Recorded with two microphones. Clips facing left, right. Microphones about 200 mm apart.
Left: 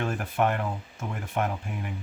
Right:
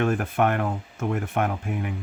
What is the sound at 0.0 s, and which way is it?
Speech, 50° right (ahead or behind).